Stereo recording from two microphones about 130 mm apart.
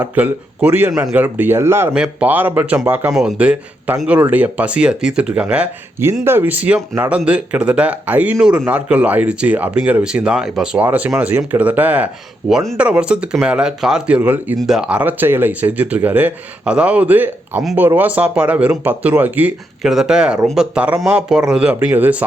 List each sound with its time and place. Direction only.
0.0 s speech: 15° right (ahead or behind)
1.9 s speech: 5° right (ahead or behind)